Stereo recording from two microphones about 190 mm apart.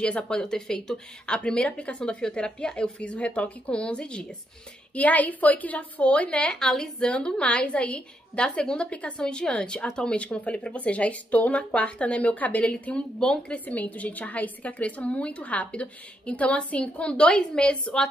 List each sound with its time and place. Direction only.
0.0 s a woman's voice: 5° left (ahead or behind)